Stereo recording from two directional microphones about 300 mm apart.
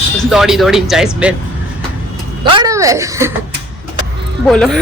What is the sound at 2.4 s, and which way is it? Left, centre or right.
Speech, centre.